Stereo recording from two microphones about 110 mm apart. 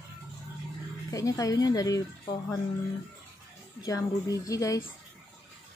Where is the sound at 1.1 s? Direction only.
30° left (ahead or behind).